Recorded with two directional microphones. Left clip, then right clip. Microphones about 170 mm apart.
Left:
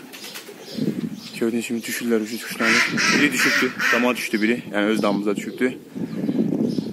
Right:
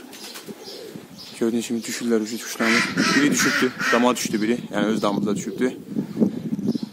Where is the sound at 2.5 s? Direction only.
65° right (ahead or behind).